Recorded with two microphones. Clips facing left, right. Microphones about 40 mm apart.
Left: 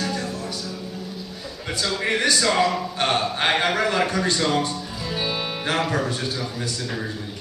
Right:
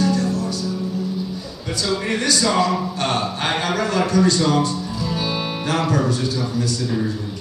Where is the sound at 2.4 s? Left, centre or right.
Centre.